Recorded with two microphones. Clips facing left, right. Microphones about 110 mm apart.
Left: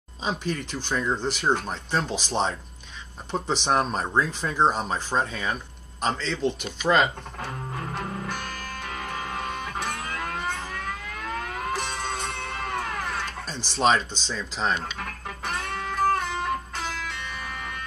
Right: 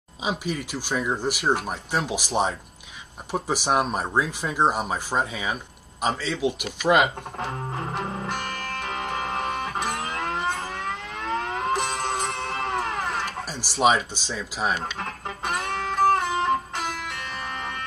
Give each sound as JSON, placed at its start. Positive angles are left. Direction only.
{"t": 0.2, "sound": "speech", "side_deg": -10}
{"t": 7.3, "sound": "music", "side_deg": -25}
{"t": 13.2, "sound": "speech", "side_deg": -10}
{"t": 14.8, "sound": "music", "side_deg": -25}